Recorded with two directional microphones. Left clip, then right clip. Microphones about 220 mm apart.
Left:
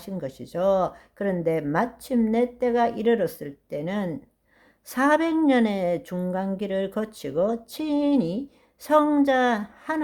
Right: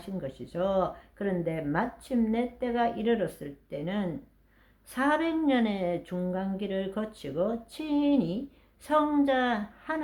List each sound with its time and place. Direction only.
0.0 s speech: 40° left (ahead or behind)